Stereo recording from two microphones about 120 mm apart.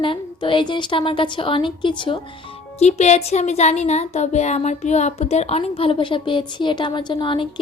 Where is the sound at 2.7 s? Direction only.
65° left (ahead or behind).